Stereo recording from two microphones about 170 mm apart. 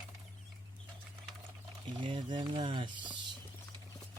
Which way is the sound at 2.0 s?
30° right (ahead or behind).